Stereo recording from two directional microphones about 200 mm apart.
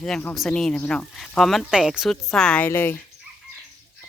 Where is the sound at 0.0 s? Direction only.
5° left (ahead or behind).